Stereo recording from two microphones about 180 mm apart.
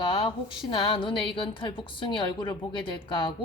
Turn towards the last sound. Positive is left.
turn(degrees=25)  # may be behind; listen again after turning